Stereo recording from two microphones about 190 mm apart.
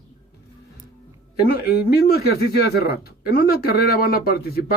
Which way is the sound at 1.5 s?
55° left (ahead or behind).